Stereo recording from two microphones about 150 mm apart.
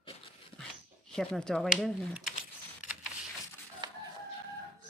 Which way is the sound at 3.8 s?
30° right (ahead or behind).